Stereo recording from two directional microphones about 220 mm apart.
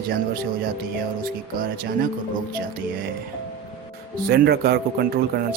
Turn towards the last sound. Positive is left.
turn(degrees=-45)  # may be behind; listen again after turning